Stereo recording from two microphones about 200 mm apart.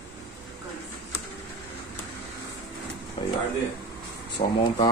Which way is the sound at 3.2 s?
25° left (ahead or behind).